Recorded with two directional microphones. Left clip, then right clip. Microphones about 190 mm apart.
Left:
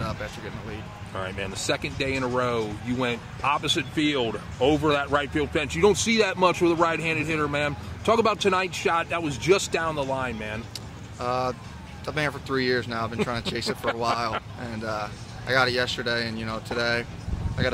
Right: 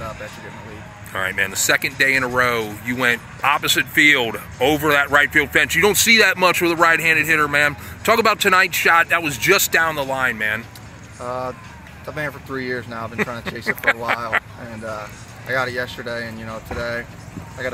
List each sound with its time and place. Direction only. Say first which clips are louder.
1.1 s speech: right 11 dB; 10° right (ahead or behind)
11.1 s speech: even; 25° left (ahead or behind)
14.9 s speech: right 1 dB; 25° left (ahead or behind)